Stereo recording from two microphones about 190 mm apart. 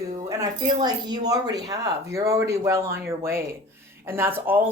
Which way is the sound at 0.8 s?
25° right (ahead or behind).